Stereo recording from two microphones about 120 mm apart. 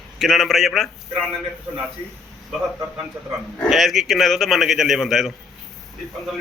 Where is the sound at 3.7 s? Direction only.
Centre (ahead or behind).